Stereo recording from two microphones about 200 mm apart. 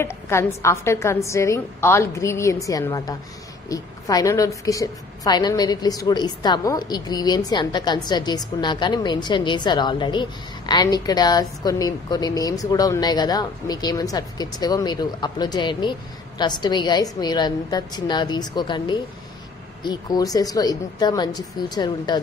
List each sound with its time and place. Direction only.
0.0 s a woman's voice: 15° left (ahead or behind)